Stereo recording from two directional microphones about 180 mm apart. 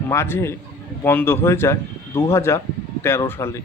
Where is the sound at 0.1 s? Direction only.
15° left (ahead or behind).